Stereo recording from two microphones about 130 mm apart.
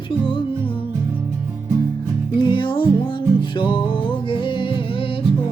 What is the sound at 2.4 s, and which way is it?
Music, 40° left (ahead or behind).